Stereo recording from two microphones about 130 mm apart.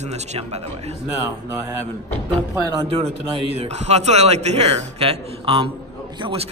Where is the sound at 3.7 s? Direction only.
55° right (ahead or behind).